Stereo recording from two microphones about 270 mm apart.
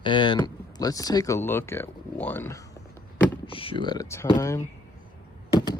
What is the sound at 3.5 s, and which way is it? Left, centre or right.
Speech, centre.